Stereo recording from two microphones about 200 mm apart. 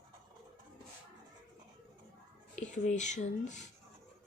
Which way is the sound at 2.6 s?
35° left (ahead or behind).